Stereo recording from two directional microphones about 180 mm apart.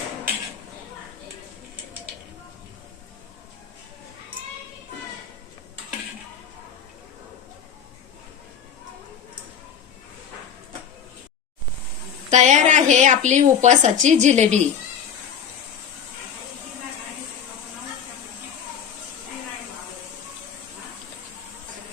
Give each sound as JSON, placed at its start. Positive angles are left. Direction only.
{"t": 12.3, "sound": "a woman's voice", "side_deg": -40}